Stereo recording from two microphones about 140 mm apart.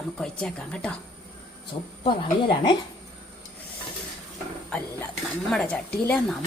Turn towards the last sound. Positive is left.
turn(degrees=10)  # may be behind; listen again after turning